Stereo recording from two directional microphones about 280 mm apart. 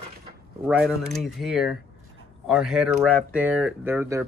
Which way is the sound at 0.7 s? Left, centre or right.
Centre.